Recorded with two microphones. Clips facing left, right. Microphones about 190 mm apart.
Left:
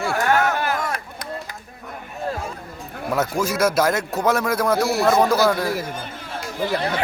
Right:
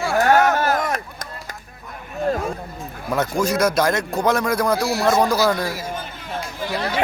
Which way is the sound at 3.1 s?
5° left (ahead or behind).